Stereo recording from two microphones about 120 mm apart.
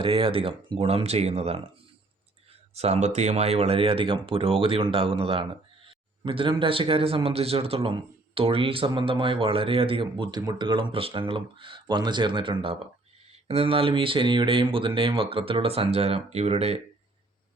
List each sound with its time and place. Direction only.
0.0 s speech: 50° right (ahead or behind)
2.7 s speech: 65° right (ahead or behind); by 12.9 s 45° right (ahead or behind)
13.3 s speech: 55° right (ahead or behind)